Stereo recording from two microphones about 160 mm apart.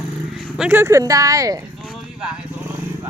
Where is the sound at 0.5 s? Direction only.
10° right (ahead or behind).